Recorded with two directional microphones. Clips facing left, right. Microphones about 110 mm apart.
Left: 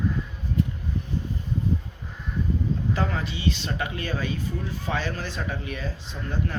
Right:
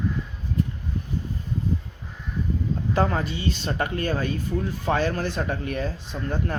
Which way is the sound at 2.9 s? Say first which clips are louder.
Right 5 dB; 45° right (ahead or behind).